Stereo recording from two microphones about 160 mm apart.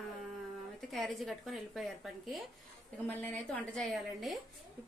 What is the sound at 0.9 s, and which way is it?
A woman's voice, centre (ahead or behind).